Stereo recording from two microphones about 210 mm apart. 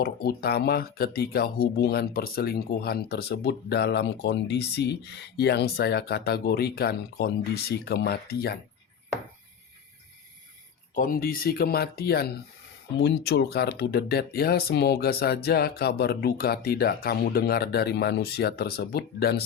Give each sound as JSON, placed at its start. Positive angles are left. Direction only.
{"t": 0.0, "sound": "speech", "side_deg": 45}
{"t": 10.9, "sound": "speech", "side_deg": 40}